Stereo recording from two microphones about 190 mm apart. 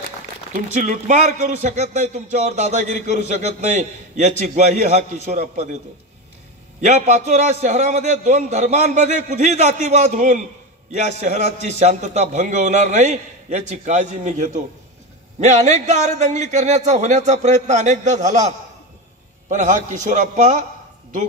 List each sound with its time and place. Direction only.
0.7 s a man's voice: 40° right (ahead or behind)
6.8 s a man's voice: 35° right (ahead or behind)
19.5 s a man's voice: 40° right (ahead or behind)